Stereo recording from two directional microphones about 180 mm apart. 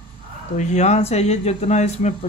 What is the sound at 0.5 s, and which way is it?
Speech, 40° left (ahead or behind).